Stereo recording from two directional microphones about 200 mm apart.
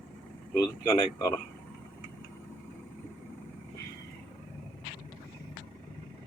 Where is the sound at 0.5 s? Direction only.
15° left (ahead or behind).